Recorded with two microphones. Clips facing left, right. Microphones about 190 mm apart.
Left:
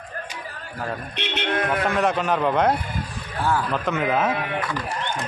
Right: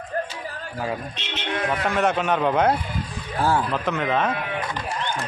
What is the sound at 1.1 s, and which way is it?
Speech, 60° left (ahead or behind).